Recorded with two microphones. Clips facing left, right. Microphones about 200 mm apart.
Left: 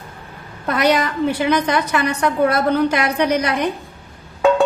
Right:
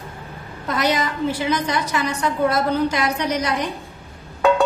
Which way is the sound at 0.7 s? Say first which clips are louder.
Left 4 dB; 60° left (ahead or behind).